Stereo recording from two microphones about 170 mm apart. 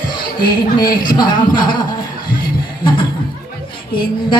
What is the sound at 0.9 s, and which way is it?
Speech, 55° left (ahead or behind).